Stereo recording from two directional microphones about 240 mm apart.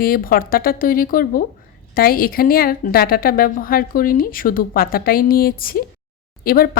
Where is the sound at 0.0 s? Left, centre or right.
Left.